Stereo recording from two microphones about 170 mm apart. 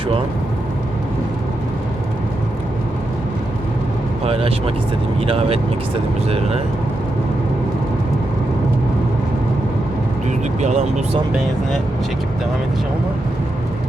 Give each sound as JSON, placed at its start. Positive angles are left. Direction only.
{"t": 4.3, "sound": "speech", "side_deg": -35}
{"t": 10.6, "sound": "speech", "side_deg": -45}